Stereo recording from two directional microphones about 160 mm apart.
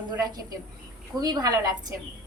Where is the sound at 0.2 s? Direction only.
25° right (ahead or behind).